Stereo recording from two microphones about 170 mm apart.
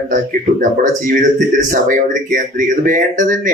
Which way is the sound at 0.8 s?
50° right (ahead or behind).